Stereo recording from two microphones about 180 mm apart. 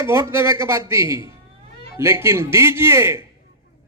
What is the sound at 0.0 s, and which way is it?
A man's voice, 15° right (ahead or behind).